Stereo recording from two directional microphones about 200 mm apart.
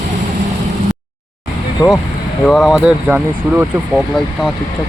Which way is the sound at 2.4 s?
Centre (ahead or behind).